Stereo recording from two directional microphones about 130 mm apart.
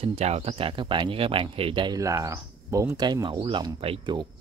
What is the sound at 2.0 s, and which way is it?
Speech, 25° right (ahead or behind).